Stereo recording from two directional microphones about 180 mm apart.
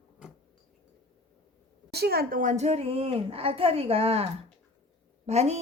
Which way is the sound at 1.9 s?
60° right (ahead or behind).